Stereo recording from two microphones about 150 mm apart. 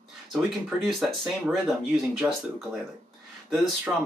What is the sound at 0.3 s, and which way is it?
Speech, 5° right (ahead or behind).